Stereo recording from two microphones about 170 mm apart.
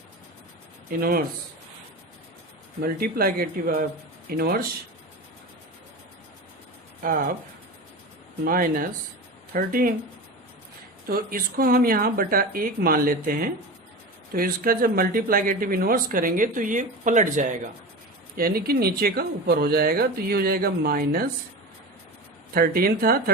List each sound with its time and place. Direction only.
0.9 s speech: 60° right (ahead or behind)
2.8 s speech: 60° right (ahead or behind)
8.4 s speech: 55° right (ahead or behind)
11.0 s speech: 60° right (ahead or behind)
18.3 s speech: 60° right (ahead or behind)
22.5 s speech: 60° right (ahead or behind)